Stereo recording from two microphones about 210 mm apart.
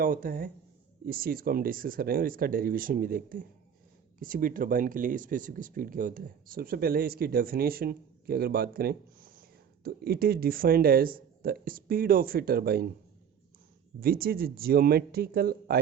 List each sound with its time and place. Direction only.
0.0 s speech: 40° right (ahead or behind)
14.0 s speech: 45° right (ahead or behind)